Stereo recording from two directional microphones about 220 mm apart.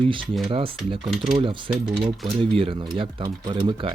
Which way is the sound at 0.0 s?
25° right (ahead or behind).